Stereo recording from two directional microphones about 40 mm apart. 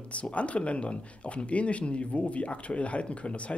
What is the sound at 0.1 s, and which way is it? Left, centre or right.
Speech, left.